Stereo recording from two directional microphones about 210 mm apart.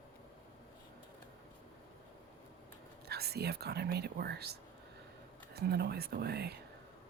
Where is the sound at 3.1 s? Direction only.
50° right (ahead or behind).